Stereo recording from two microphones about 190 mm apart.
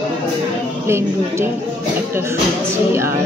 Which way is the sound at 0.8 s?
15° right (ahead or behind).